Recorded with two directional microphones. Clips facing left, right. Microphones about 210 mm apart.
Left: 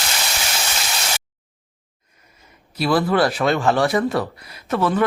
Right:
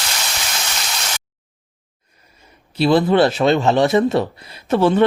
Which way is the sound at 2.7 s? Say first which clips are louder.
Right 4 dB; 25° right (ahead or behind).